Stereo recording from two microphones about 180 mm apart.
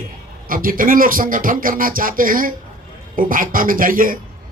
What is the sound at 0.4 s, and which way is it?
Speech, 50° right (ahead or behind).